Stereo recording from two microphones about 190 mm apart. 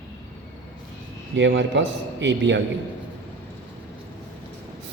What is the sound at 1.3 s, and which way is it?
A man's voice, 75° right (ahead or behind).